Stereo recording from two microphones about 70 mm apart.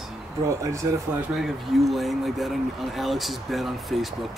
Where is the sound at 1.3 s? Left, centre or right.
Centre.